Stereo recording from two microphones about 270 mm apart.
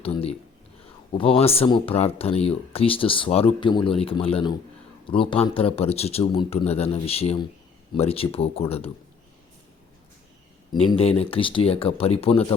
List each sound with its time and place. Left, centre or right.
0.0 s speech: left
10.7 s speech: centre